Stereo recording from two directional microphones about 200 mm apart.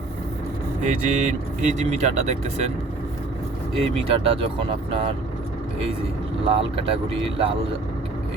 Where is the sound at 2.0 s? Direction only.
35° right (ahead or behind).